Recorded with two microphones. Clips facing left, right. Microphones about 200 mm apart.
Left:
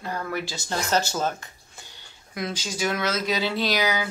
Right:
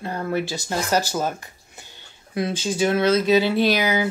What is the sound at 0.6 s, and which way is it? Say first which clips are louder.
Speech: left 2 dB; 10° right (ahead or behind).